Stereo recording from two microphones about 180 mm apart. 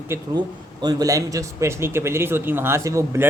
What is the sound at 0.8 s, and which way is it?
Speech, 20° right (ahead or behind).